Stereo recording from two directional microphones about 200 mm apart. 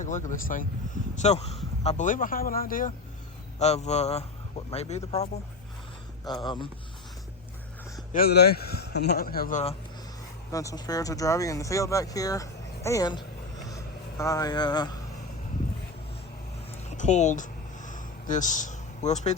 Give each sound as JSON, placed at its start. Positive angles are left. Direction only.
{"t": 0.0, "sound": "a man's voice", "side_deg": 40}
{"t": 8.1, "sound": "a man's voice", "side_deg": 50}
{"t": 10.5, "sound": "speech", "side_deg": 15}
{"t": 13.7, "sound": "vehicle", "side_deg": 15}
{"t": 16.7, "sound": "a sound", "side_deg": 35}